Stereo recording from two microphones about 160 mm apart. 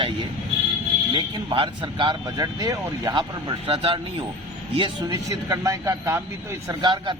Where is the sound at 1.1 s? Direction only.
30° right (ahead or behind).